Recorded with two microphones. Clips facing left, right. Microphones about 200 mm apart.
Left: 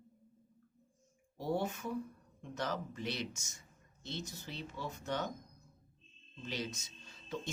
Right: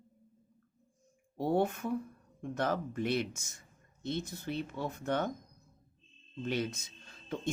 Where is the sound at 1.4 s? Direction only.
55° right (ahead or behind).